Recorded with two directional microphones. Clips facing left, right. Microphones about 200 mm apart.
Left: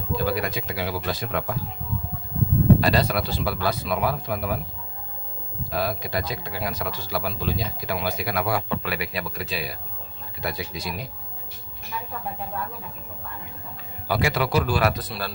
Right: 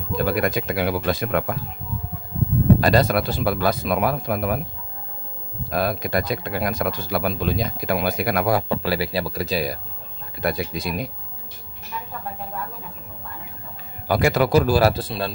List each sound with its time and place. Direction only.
0.2 s speech: 55° right (ahead or behind)
2.8 s a man's voice: 45° right (ahead or behind)
5.7 s speech: 55° right (ahead or behind)
8.5 s a man's voice: 35° right (ahead or behind)
10.4 s speech: 55° right (ahead or behind)
14.0 s a man's voice: 45° right (ahead or behind); by 15.3 s 25° right (ahead or behind)